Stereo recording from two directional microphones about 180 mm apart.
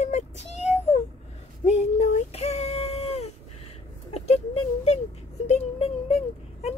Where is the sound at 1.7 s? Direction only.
35° left (ahead or behind).